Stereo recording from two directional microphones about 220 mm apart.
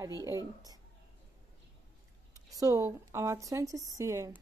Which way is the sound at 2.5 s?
15° right (ahead or behind).